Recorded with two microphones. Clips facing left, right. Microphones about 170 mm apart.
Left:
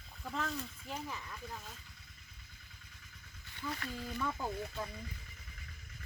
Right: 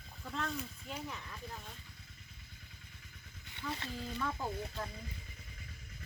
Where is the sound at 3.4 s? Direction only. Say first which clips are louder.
Even; 25° right (ahead or behind).